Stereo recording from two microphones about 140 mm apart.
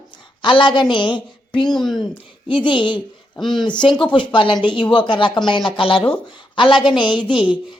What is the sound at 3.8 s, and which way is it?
A woman's voice, 35° left (ahead or behind).